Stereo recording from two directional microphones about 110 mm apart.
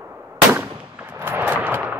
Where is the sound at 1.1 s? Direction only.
20° right (ahead or behind).